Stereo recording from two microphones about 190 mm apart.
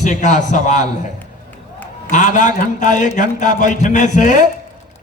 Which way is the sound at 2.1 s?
40° left (ahead or behind).